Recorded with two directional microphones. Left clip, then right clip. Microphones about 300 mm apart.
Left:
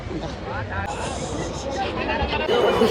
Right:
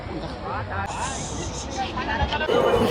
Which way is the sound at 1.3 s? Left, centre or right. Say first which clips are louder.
Left 4 dB; centre.